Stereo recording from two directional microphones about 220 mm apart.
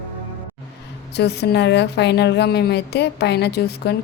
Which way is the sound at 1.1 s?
50° left (ahead or behind).